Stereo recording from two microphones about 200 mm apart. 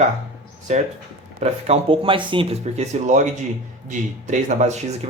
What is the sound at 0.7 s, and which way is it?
Speech, 35° right (ahead or behind).